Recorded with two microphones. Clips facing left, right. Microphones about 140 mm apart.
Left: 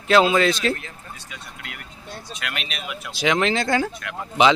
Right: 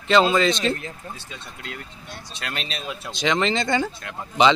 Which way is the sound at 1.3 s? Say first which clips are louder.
Right 2 dB; 30° right (ahead or behind).